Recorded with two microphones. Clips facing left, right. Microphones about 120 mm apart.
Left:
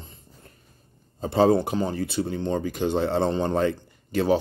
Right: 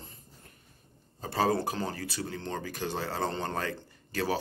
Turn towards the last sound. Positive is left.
turn(degrees=20)  # may be behind; listen again after turning